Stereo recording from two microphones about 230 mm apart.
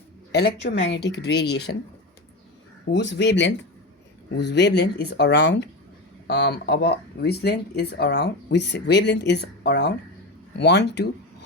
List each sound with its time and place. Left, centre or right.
0.3 s speech: left
2.9 s speech: left